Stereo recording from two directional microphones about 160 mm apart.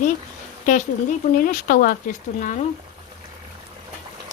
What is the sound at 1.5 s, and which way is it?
Speech, 60° left (ahead or behind).